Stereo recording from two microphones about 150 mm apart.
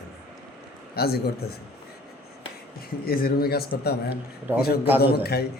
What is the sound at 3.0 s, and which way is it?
Speech, 85° left.